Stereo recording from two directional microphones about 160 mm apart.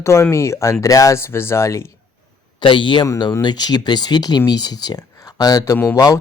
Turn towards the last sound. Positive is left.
turn(degrees=15)  # may be behind; listen again after turning